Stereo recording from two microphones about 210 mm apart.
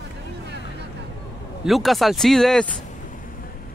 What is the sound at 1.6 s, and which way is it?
Speech, centre (ahead or behind).